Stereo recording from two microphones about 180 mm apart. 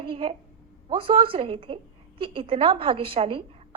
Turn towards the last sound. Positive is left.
turn(degrees=-30)  # may be behind; listen again after turning